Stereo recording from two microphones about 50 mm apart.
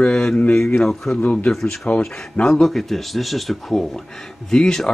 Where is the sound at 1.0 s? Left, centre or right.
Centre.